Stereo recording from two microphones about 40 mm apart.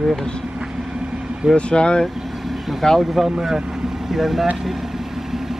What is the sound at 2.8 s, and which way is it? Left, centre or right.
Speech, centre.